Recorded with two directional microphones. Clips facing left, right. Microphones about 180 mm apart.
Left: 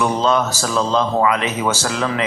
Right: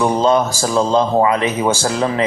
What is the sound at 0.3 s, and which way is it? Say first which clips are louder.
Speech: right 3 dB; 25° right (ahead or behind).